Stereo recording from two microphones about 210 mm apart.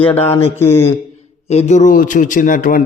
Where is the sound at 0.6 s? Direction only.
10° left (ahead or behind).